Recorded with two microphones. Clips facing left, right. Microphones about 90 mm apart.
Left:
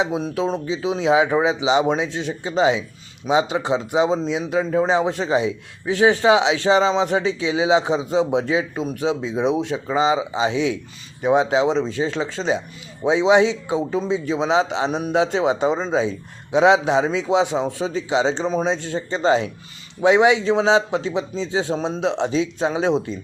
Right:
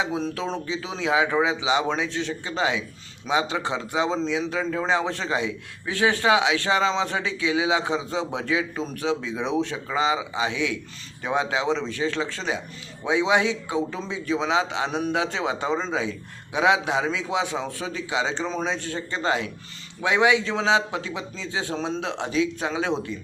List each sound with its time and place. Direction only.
0.3 s a man's voice: 15° left (ahead or behind)